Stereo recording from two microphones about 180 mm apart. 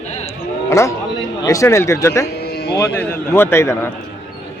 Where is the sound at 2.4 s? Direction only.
65° left (ahead or behind).